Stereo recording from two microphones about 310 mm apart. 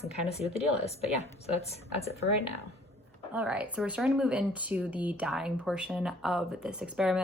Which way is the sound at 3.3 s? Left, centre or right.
Centre.